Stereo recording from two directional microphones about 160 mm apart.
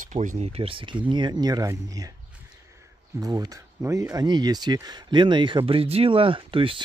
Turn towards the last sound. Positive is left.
turn(degrees=-35)  # may be behind; listen again after turning